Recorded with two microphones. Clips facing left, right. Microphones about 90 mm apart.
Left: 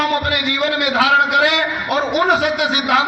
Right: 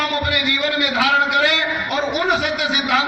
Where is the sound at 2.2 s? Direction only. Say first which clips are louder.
Left 3 dB; 40° left (ahead or behind).